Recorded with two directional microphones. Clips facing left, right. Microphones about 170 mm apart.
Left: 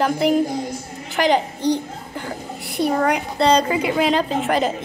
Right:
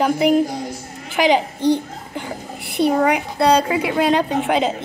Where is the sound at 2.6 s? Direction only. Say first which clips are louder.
Right 3 dB; 65° right (ahead or behind).